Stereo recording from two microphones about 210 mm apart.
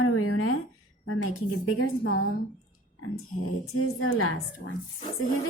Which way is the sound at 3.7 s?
90° left.